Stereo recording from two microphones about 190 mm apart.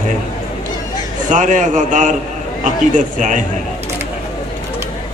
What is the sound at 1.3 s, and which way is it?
A man's voice, 40° right (ahead or behind).